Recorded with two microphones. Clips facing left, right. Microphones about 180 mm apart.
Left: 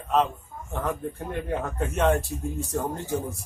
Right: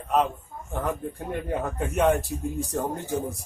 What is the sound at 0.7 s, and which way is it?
Speech, 15° right (ahead or behind).